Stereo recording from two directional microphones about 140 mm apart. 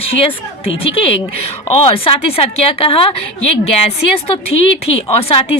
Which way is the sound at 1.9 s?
45° left (ahead or behind).